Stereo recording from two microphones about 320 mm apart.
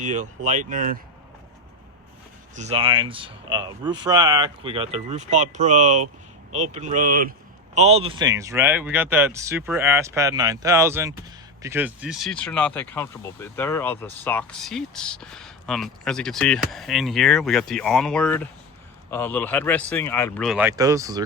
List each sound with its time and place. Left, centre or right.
0.0 s speech: right
2.6 s speech: centre